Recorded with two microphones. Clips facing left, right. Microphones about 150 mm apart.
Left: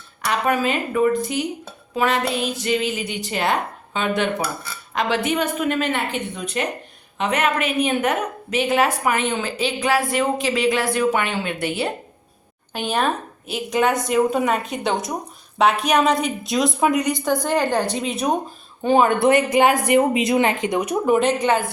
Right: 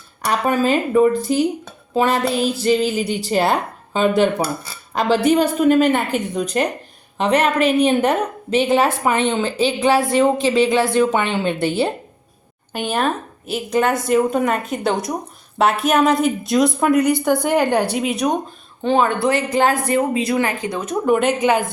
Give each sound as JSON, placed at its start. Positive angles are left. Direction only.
{"t": 0.3, "sound": "a woman's voice", "side_deg": -30}
{"t": 12.8, "sound": "a woman's voice", "side_deg": -5}
{"t": 18.8, "sound": "a woman's voice", "side_deg": 10}
{"t": 21.2, "sound": "a woman's voice", "side_deg": -5}